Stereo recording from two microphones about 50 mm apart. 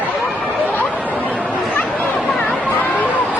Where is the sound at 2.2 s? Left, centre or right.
Centre.